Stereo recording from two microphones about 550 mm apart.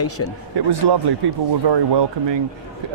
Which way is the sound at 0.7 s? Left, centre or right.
Right.